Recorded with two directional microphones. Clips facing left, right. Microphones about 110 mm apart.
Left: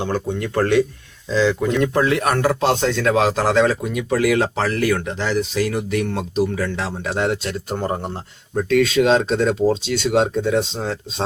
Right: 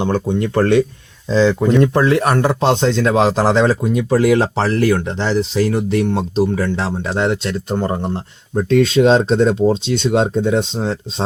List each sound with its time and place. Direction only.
0.0 s speech: 25° right (ahead or behind)